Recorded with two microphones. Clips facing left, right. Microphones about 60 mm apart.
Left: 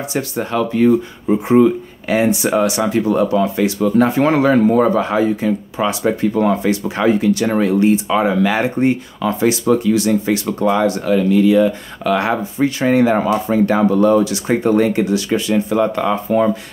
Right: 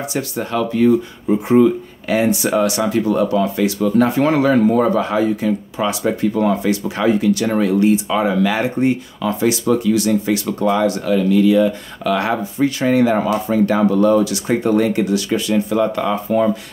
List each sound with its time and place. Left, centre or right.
0.0 s speech: left